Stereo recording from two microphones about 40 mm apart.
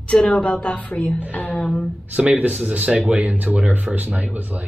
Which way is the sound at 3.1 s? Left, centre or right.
Right.